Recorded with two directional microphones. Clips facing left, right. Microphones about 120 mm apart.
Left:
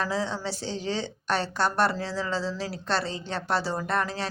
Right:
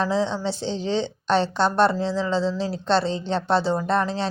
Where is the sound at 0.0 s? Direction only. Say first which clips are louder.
Right 6 dB; 25° right (ahead or behind).